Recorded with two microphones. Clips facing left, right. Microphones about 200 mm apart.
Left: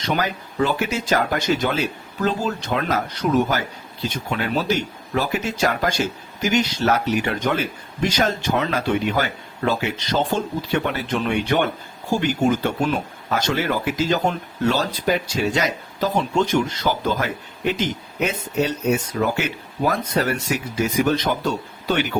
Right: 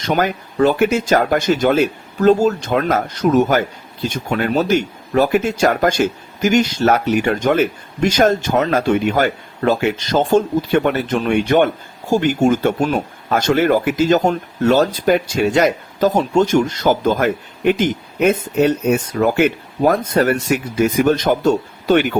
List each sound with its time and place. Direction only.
0.0 s speech: 50° right (ahead or behind)